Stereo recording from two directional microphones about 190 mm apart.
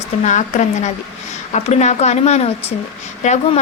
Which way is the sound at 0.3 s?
40° left (ahead or behind).